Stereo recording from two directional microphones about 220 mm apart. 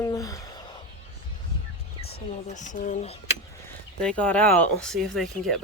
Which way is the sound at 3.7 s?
5° left (ahead or behind).